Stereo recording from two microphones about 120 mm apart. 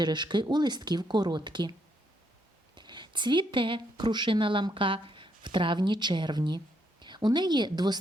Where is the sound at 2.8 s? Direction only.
40° right (ahead or behind).